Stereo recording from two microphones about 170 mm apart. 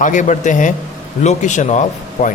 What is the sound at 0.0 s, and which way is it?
Speech, 45° left (ahead or behind).